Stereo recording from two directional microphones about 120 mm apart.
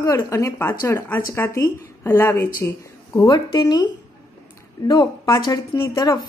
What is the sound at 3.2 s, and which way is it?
Speech, 35° left (ahead or behind).